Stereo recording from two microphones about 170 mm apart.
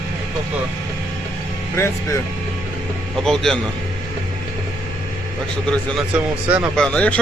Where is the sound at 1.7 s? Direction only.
15° left (ahead or behind).